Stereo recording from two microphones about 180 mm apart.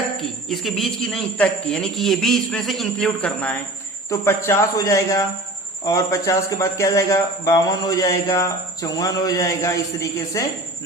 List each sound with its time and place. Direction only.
0.2 s speech: centre (ahead or behind); by 10.4 s 15° left (ahead or behind)